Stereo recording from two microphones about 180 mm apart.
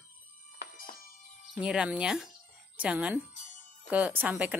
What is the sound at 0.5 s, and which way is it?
Music, 50° left (ahead or behind).